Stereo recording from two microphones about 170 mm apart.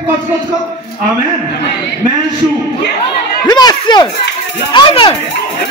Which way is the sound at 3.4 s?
25° left (ahead or behind).